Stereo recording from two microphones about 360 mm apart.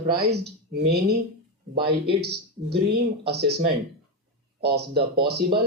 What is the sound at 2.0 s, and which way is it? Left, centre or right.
Speech, right.